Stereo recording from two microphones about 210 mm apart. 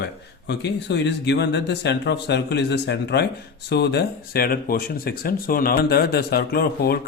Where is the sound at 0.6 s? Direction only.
55° left (ahead or behind).